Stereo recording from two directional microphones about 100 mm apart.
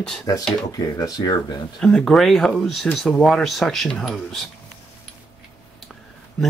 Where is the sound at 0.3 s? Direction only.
40° left (ahead or behind).